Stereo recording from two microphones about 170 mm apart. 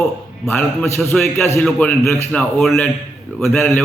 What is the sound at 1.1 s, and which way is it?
A man's voice, centre (ahead or behind).